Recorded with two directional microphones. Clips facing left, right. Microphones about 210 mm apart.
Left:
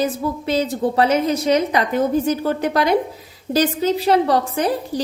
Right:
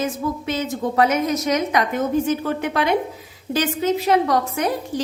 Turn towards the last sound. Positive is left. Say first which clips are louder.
# left 2 dB
turn(degrees=30)  # may be behind; listen again after turning